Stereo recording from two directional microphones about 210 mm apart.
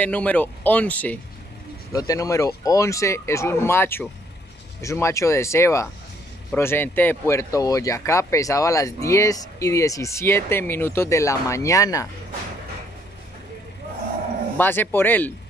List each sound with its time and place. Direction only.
0.0 s speech: 5° left (ahead or behind)
14.6 s speech: 10° left (ahead or behind)